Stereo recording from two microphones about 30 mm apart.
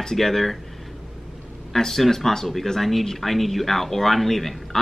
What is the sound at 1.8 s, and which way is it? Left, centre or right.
A man's voice, centre.